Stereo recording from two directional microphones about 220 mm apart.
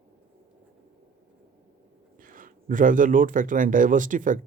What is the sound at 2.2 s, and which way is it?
Speech, 40° right (ahead or behind).